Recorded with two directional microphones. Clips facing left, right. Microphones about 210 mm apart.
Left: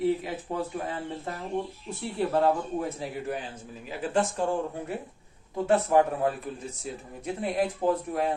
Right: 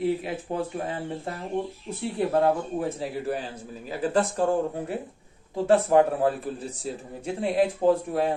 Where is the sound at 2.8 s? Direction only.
30° right (ahead or behind).